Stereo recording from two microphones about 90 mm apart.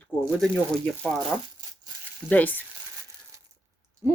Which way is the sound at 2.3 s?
20° left (ahead or behind).